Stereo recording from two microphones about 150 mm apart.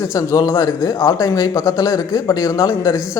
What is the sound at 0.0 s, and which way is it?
Speech, 20° left (ahead or behind).